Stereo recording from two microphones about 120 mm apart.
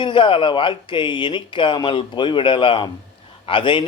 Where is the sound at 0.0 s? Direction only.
40° left (ahead or behind).